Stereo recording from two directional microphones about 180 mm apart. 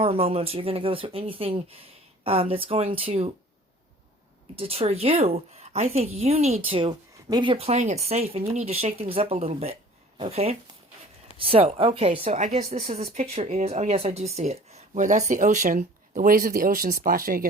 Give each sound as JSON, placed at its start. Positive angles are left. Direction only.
{"t": 0.0, "sound": "a woman's voice", "side_deg": -35}
{"t": 4.5, "sound": "a woman's voice", "side_deg": -35}